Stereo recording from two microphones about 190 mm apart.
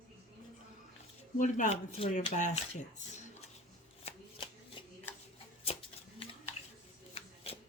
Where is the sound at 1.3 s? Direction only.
40° left (ahead or behind).